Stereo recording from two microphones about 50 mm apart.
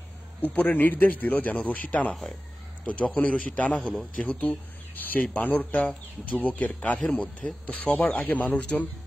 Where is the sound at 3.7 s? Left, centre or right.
Centre.